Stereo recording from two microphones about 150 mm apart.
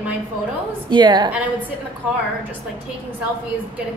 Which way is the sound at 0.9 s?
30° right (ahead or behind).